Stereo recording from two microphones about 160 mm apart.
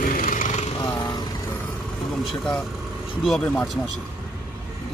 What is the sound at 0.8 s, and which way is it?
Vehicle, 25° left (ahead or behind).